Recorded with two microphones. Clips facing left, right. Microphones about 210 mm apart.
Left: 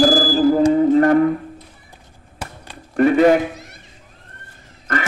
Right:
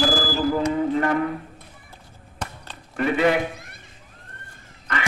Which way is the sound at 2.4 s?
10° left (ahead or behind).